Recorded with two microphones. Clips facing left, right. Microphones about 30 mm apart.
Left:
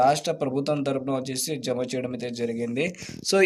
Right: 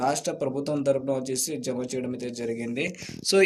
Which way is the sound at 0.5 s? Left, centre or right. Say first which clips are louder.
Even; left.